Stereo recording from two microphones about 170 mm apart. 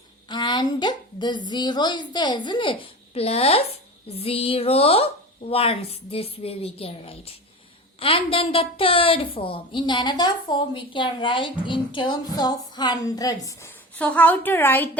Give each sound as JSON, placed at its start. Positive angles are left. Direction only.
{"t": 0.3, "sound": "a woman's voice", "side_deg": 25}